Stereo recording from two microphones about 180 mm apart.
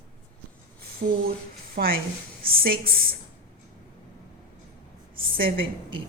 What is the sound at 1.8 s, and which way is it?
Speech, 60° right (ahead or behind).